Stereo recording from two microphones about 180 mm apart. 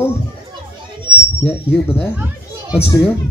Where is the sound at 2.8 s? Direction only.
15° left (ahead or behind).